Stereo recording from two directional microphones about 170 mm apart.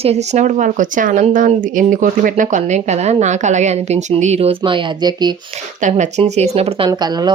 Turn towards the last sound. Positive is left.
turn(degrees=-25)  # may be behind; listen again after turning